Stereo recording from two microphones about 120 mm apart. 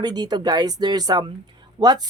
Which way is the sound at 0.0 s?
35° right (ahead or behind).